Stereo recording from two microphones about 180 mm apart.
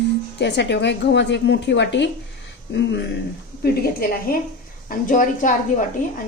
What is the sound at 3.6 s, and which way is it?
Speech, 60° left (ahead or behind).